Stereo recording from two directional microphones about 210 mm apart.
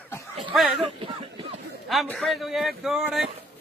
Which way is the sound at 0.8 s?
25° right (ahead or behind).